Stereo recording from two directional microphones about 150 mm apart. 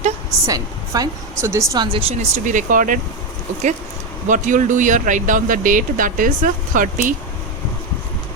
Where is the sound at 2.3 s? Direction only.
60° right (ahead or behind).